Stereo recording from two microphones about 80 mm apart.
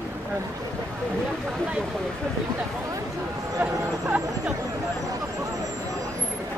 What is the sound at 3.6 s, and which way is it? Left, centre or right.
Speech, centre.